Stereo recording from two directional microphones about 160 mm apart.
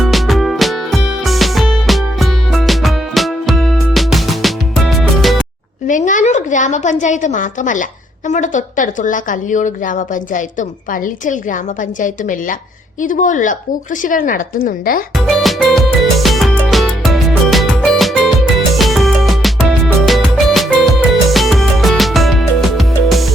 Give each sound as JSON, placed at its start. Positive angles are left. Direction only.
{"t": 0.0, "sound": "music", "side_deg": 0}
{"t": 5.9, "sound": "a woman's voice", "side_deg": 50}
{"t": 15.3, "sound": "music", "side_deg": 0}